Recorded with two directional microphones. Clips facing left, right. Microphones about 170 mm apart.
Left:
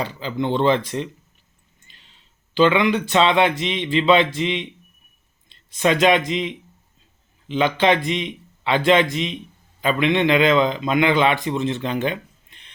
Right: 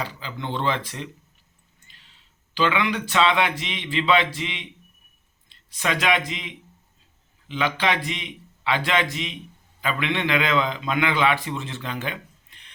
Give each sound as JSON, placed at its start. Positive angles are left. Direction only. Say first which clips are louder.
{"t": 0.0, "sound": "a man's voice", "louder": "left 8 dB", "side_deg": 25}
{"t": 1.9, "sound": "a sound", "louder": "left 2 dB", "side_deg": 20}
{"t": 2.6, "sound": "a man's voice", "louder": "left 7 dB", "side_deg": 20}